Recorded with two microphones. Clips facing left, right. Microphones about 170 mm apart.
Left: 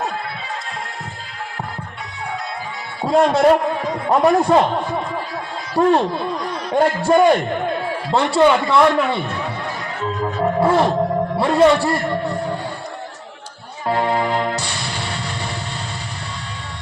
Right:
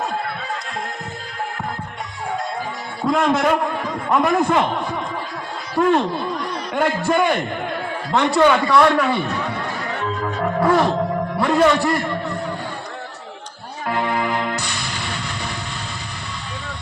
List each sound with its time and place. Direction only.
3.1 s a man's voice: 35° left (ahead or behind)
5.7 s a man's voice: 35° left (ahead or behind)
8.4 s a man's voice: 25° left (ahead or behind)
10.4 s music: 25° left (ahead or behind)
11.3 s a man's voice: 30° left (ahead or behind)
13.8 s music: 30° left (ahead or behind)